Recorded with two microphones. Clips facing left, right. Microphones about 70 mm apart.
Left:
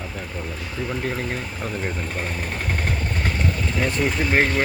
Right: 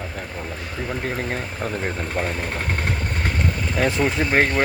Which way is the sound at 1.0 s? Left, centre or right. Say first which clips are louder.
Right 2 dB; right.